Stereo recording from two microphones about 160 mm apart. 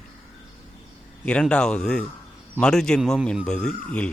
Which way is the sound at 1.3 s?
5° left (ahead or behind).